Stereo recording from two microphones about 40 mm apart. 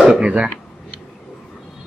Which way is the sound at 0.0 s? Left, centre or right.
Right.